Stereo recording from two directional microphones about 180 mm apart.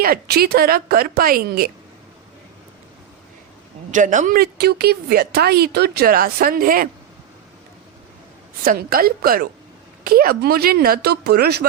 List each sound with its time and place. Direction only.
0.0 s speech: 60° right (ahead or behind)
3.9 s speech: 45° right (ahead or behind)
8.6 s speech: 55° right (ahead or behind)